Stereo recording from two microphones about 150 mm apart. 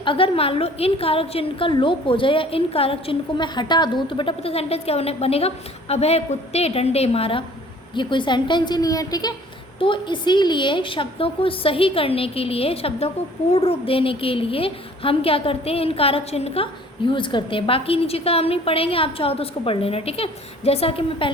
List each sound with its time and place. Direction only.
0.0 s a woman's voice: 35° left (ahead or behind)